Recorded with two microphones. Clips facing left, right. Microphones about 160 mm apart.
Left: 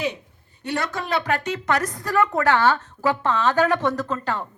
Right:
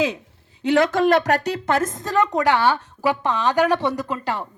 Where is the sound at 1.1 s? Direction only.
40° right (ahead or behind).